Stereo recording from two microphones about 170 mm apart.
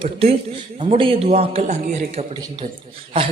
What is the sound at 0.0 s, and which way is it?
A man's voice, 35° right (ahead or behind).